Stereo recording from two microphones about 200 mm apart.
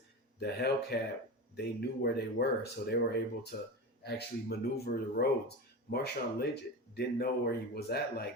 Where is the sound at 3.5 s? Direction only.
45° left (ahead or behind).